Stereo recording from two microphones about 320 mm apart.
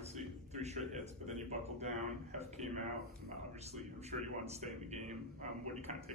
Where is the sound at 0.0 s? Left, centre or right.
Right.